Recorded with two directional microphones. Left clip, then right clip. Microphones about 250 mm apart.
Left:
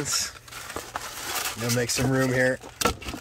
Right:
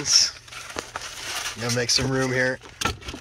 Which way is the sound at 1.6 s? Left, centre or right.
Centre.